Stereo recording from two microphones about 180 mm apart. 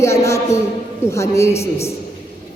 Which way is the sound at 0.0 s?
15° left (ahead or behind).